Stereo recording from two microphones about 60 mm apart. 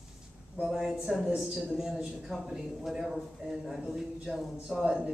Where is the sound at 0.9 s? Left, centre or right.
Centre.